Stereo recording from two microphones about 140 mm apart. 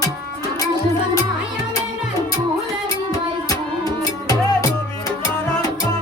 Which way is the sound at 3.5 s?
25° left (ahead or behind).